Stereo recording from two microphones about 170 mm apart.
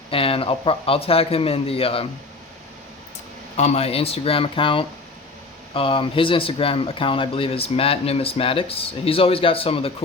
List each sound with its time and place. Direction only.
0.1 s speech: 35° left (ahead or behind)
3.6 s speech: 40° left (ahead or behind)